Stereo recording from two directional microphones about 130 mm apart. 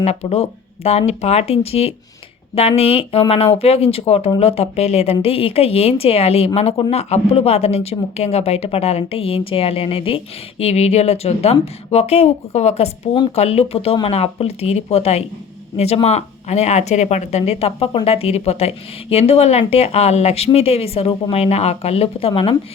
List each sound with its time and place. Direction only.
0.0 s speech: 55° left (ahead or behind)